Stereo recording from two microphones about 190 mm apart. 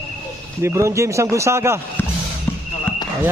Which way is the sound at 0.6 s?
15° right (ahead or behind).